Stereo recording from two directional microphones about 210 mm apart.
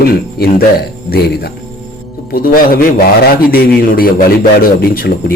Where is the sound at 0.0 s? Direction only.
45° left (ahead or behind).